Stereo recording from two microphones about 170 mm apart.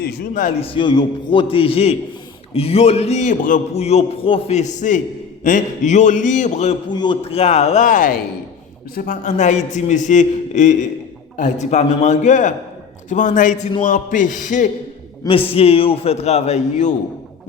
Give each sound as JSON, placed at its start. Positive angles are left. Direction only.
{"t": 0.0, "sound": "a man's voice", "side_deg": 65}
{"t": 0.6, "sound": "a man's voice", "side_deg": 30}
{"t": 6.8, "sound": "a man's voice", "side_deg": 25}
{"t": 15.4, "sound": "a man's voice", "side_deg": 35}